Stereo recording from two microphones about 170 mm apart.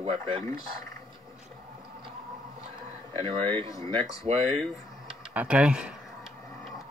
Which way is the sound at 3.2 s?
35° right (ahead or behind).